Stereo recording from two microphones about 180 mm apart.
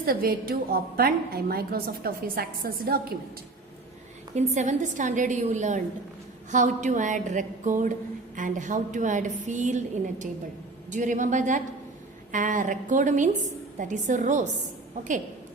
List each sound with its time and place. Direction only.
0.0 s a woman's voice: 55° right (ahead or behind)
4.4 s a woman's voice: 40° right (ahead or behind)